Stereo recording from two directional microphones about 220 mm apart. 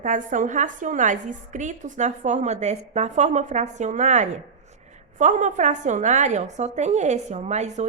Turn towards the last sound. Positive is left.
turn(degrees=-30)  # may be behind; listen again after turning